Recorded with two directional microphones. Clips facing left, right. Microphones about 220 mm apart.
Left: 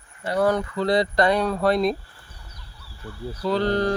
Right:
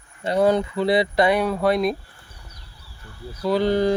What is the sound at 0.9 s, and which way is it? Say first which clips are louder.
Speech: right 1 dB; 5° right (ahead or behind).